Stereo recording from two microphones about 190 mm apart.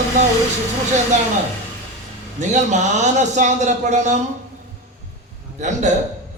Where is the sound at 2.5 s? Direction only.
40° right (ahead or behind).